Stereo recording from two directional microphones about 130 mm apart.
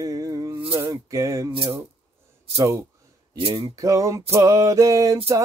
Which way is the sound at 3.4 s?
45° right (ahead or behind).